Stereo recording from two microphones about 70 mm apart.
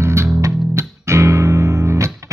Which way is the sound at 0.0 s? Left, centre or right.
Right.